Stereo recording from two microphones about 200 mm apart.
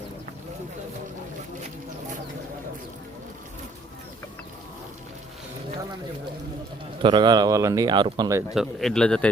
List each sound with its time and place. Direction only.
7.0 s speech: 25° right (ahead or behind)
8.5 s a man's voice: centre (ahead or behind)